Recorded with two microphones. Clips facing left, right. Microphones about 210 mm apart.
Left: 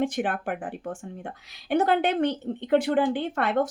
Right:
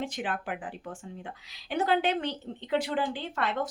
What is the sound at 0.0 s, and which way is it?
Speech, 50° left (ahead or behind).